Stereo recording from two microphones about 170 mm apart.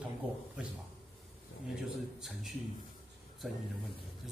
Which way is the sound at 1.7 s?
Centre (ahead or behind).